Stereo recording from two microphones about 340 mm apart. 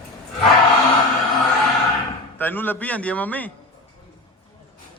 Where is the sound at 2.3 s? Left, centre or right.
Centre.